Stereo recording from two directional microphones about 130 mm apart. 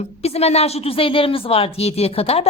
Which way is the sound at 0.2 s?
55° left (ahead or behind).